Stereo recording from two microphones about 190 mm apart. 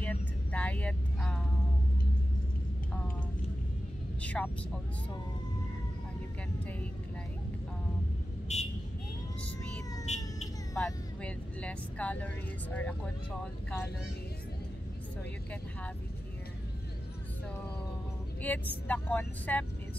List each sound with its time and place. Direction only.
0.0 s vehicle: 10° left (ahead or behind)
4.2 s vehicle: 5° left (ahead or behind)
8.5 s vehicle: 35° left (ahead or behind)
10.0 s a sound: 35° left (ahead or behind)
10.8 s speech: 5° left (ahead or behind)
18.4 s speech: 10° left (ahead or behind)